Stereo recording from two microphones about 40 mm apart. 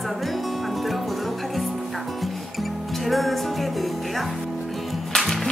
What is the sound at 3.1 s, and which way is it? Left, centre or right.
Music, centre.